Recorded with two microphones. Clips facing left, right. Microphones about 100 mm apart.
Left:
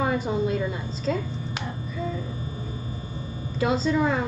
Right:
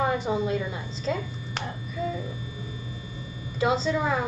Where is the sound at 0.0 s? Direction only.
Centre (ahead or behind).